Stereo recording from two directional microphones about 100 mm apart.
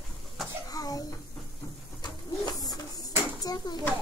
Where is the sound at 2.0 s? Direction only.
40° left (ahead or behind).